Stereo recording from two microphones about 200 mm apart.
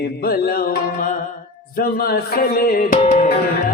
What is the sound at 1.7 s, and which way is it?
Music, 50° left (ahead or behind).